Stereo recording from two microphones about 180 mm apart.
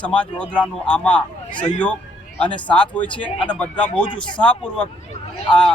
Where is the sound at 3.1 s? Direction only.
25° left (ahead or behind).